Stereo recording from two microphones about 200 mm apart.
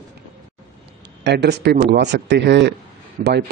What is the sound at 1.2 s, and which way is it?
Speech, 55° right (ahead or behind).